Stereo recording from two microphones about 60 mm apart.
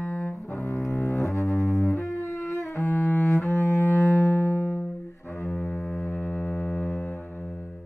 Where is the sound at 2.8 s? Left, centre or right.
Left.